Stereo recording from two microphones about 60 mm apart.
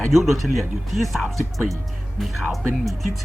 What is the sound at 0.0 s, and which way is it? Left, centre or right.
Speech, centre.